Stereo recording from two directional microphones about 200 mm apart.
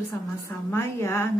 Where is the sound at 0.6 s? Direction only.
10° left (ahead or behind).